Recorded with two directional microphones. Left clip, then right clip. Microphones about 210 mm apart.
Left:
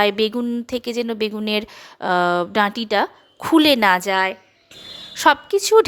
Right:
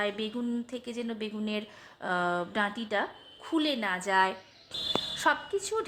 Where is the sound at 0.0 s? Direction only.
45° left (ahead or behind).